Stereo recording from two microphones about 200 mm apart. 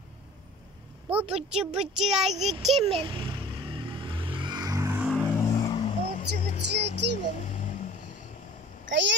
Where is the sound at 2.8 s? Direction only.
25° right (ahead or behind); by 5.1 s 10° right (ahead or behind).